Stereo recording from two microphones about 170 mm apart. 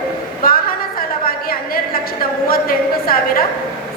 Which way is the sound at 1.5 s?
60° left (ahead or behind).